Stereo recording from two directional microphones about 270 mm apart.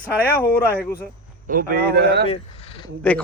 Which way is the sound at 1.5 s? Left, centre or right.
Right.